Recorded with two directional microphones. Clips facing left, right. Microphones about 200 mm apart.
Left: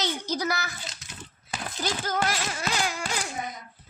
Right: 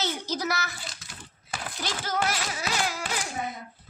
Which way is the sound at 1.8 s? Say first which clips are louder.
Left 2 dB; centre (ahead or behind).